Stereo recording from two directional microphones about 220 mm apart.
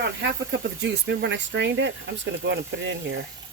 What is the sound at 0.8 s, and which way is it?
Speech, 55° right (ahead or behind).